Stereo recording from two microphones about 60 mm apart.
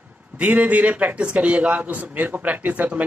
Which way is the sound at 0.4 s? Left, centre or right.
Right.